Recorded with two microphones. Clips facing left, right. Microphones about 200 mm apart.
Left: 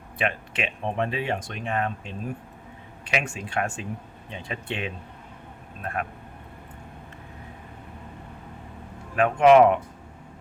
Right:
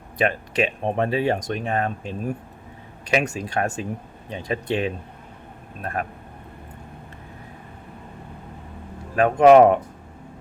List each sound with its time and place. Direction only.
0.2 s speech: 40° right (ahead or behind)
9.1 s speech: 40° right (ahead or behind)